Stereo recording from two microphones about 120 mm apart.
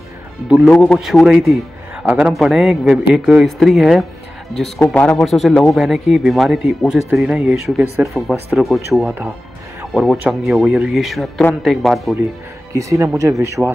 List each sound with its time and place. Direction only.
0.7 s speech: 5° left (ahead or behind)
12.7 s speech: 25° right (ahead or behind)